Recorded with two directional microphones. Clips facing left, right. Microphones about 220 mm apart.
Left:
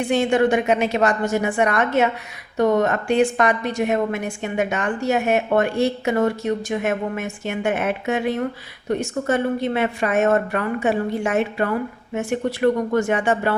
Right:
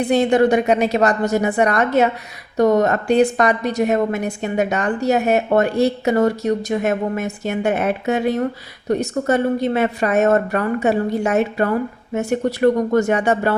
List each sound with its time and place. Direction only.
0.0 s a woman's voice: 35° right (ahead or behind)